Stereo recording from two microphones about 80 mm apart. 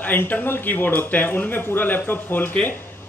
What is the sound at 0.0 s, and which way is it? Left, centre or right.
Speech, left.